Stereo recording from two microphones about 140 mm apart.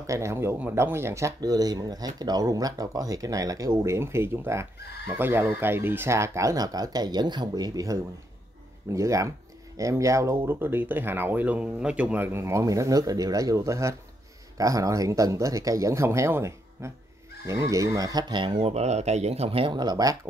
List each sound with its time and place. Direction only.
0.0 s speech: 20° right (ahead or behind)